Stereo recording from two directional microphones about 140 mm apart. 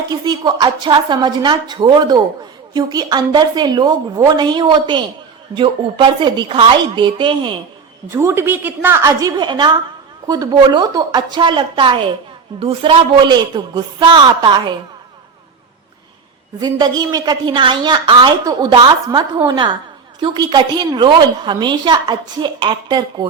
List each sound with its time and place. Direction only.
0.1 s a woman's voice: 30° right (ahead or behind)
8.1 s a woman's voice: 15° right (ahead or behind)
9.3 s a woman's voice: 30° right (ahead or behind)
16.6 s a woman's voice: 30° right (ahead or behind)